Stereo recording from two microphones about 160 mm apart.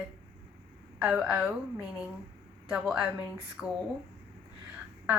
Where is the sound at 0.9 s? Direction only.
5° right (ahead or behind).